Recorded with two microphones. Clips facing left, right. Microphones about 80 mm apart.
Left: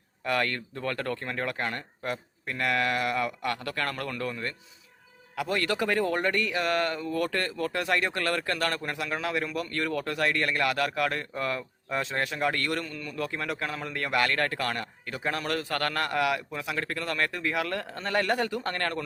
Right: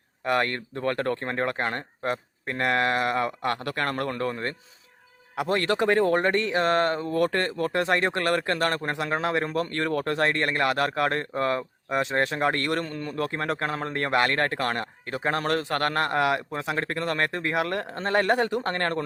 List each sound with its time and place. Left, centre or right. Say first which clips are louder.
0.3 s speech: right 3 dB; right